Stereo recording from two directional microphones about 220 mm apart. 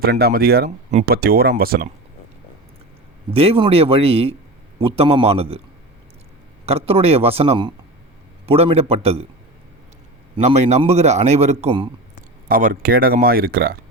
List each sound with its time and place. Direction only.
0.0 s speech: 45° right (ahead or behind)
3.3 s a man's voice: 25° right (ahead or behind)
6.7 s a man's voice: 25° right (ahead or behind)
10.3 s a man's voice: 30° right (ahead or behind)
12.5 s speech: 40° right (ahead or behind)